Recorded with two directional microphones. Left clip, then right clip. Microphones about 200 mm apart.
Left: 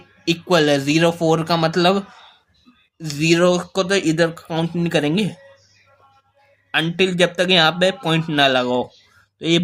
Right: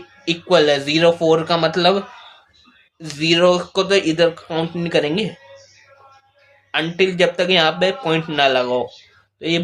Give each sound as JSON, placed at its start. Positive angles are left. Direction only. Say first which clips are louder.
{"t": 0.3, "sound": "speech", "louder": "right 2 dB", "side_deg": 35}
{"t": 6.7, "sound": "speech", "louder": "even", "side_deg": 35}